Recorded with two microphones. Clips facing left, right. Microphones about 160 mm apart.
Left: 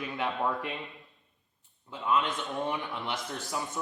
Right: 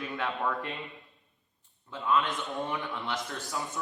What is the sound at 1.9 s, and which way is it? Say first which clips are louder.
Speech: even; 20° left (ahead or behind).